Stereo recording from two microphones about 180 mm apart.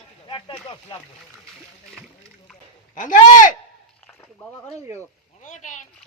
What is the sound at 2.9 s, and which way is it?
Speech, 45° left (ahead or behind).